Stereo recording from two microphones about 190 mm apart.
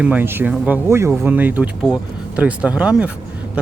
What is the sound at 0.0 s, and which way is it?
Speech, 10° right (ahead or behind).